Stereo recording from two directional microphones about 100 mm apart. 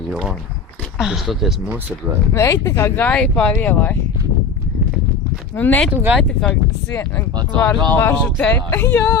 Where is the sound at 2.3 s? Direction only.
30° left (ahead or behind).